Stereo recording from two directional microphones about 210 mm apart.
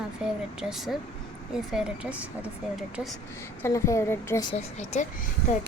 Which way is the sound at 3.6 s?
10° left (ahead or behind).